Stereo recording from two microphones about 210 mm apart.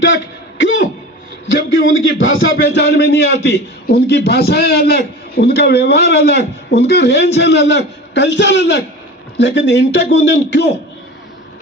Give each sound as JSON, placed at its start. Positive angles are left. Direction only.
{"t": 0.6, "sound": "throat clearing", "side_deg": 65}
{"t": 1.5, "sound": "a man's voice", "side_deg": 65}